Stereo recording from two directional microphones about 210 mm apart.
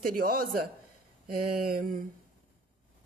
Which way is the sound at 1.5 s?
40° right (ahead or behind).